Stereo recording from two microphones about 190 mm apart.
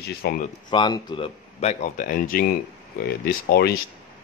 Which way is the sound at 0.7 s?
25° left (ahead or behind).